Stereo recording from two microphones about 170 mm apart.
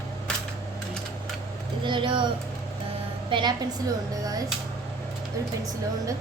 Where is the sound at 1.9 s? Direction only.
30° right (ahead or behind).